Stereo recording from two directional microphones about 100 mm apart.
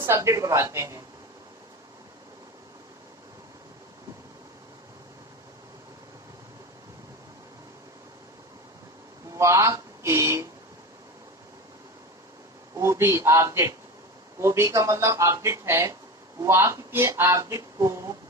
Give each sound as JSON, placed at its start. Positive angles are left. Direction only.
{"t": 0.0, "sound": "speech", "side_deg": -30}
{"t": 9.3, "sound": "a sound", "side_deg": -30}
{"t": 12.7, "sound": "speech", "side_deg": -30}